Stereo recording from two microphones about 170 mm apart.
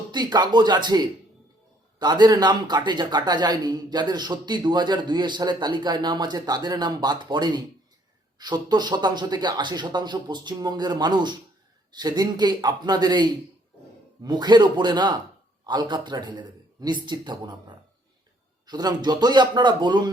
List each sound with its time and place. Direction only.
0.1 s a man's voice: 25° right (ahead or behind)
18.6 s a man's voice: 25° right (ahead or behind)